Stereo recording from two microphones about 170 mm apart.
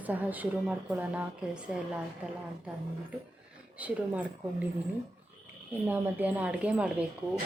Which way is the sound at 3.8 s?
10° right (ahead or behind).